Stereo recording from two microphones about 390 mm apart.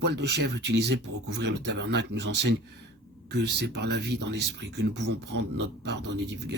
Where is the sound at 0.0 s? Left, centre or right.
Right.